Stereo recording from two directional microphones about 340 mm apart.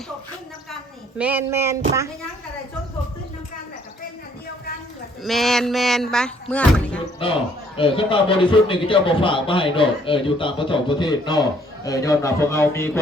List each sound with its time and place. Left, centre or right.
1.2 s a sound: centre
5.2 s speech: centre
7.2 s a man's voice: centre